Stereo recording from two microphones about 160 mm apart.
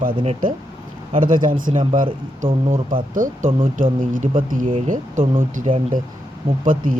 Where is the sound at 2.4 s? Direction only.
50° right (ahead or behind).